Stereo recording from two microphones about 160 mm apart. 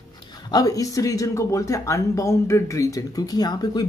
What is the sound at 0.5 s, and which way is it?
Speech, 25° left (ahead or behind).